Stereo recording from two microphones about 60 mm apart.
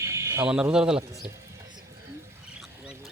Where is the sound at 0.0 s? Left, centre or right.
Right.